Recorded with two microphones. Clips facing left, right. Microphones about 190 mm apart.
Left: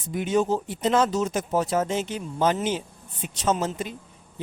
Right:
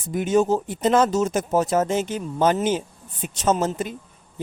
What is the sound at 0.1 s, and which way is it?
Speech, 45° right (ahead or behind).